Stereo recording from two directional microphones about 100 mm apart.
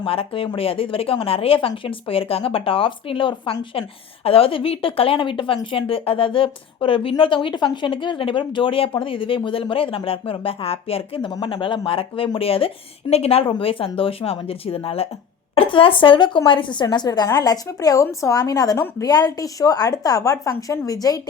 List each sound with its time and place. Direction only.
0.0 s speech: 65° left (ahead or behind)
11.3 s a woman's voice: 50° left (ahead or behind); by 14.8 s 70° left (ahead or behind)
15.5 s speech: 60° left (ahead or behind)
16.8 s a woman's voice: 45° left (ahead or behind)